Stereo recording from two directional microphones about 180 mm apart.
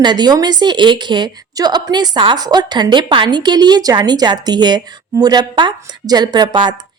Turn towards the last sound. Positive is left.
turn(degrees=-25)  # may be behind; listen again after turning